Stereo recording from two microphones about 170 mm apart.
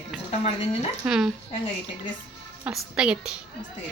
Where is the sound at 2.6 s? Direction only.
5° right (ahead or behind).